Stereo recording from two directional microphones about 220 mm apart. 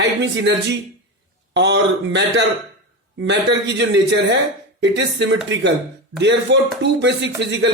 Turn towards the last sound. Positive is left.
turn(degrees=-50)  # may be behind; listen again after turning